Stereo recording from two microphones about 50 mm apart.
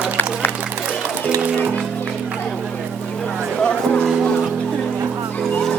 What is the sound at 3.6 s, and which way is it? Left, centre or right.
Music, centre.